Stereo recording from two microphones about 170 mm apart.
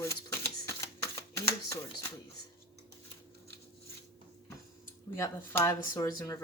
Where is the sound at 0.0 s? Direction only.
15° left (ahead or behind).